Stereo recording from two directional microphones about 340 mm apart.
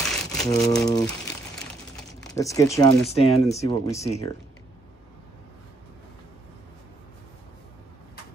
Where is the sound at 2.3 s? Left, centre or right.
Centre.